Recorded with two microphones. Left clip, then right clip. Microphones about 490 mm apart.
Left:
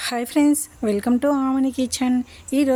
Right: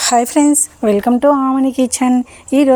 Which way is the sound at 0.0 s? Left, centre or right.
Left.